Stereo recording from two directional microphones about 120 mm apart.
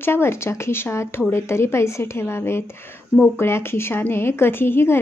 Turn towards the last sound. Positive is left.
turn(degrees=20)  # may be behind; listen again after turning